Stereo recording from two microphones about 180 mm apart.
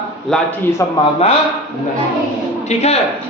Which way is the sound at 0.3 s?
5° left (ahead or behind).